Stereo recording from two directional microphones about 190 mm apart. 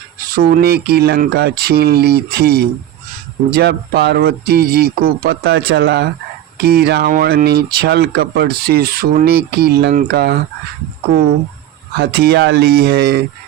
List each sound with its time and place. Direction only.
0.3 s speech: 50° right (ahead or behind)
11.9 s speech: 60° right (ahead or behind)